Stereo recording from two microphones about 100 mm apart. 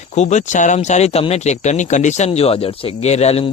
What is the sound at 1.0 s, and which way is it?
Speech, 90° left.